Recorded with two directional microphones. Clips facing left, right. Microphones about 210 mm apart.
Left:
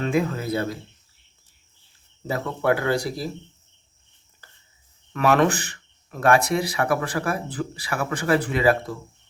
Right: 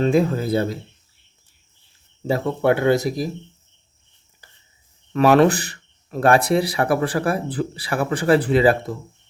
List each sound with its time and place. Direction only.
0.0 s speech: 30° right (ahead or behind)
2.2 s speech: 25° right (ahead or behind)
5.1 s speech: 30° right (ahead or behind)